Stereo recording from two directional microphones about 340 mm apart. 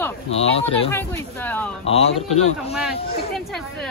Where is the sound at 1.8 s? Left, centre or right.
Centre.